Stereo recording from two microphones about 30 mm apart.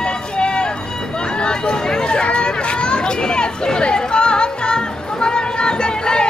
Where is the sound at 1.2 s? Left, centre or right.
Left.